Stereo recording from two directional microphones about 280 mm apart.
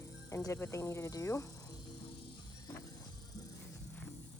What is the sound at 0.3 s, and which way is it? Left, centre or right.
Speech, centre.